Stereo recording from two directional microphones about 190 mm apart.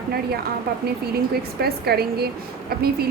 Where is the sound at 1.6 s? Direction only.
55° right (ahead or behind).